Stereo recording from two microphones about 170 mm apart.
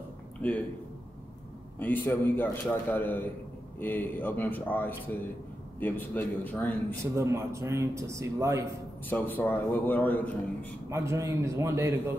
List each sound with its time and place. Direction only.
0.4 s speech: 10° left (ahead or behind)
1.8 s a man's voice: 10° left (ahead or behind)
7.2 s a man's voice: 15° right (ahead or behind)
9.1 s a man's voice: 10° left (ahead or behind)
10.9 s a man's voice: 15° right (ahead or behind)